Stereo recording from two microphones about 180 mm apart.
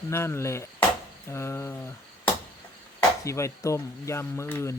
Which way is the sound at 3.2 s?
15° left (ahead or behind).